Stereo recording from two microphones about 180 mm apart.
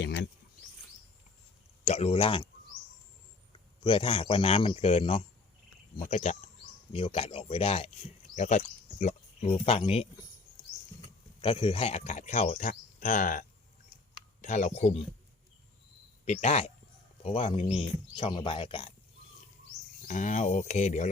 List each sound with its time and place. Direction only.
0.0 s speech: 75° left (ahead or behind)
1.8 s speech: 35° left (ahead or behind)
3.5 s a man's voice: 30° left (ahead or behind)
11.3 s speech: 30° left (ahead or behind); by 13.4 s 45° left (ahead or behind)
14.4 s speech: 40° left (ahead or behind)
16.2 s speech: 40° left (ahead or behind)
20.1 s speech: 45° left (ahead or behind)